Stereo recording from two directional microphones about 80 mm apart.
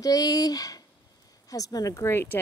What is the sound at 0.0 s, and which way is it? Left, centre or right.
Speech, left.